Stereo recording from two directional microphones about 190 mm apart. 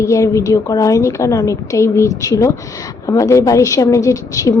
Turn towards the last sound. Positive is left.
turn(degrees=15)  # may be behind; listen again after turning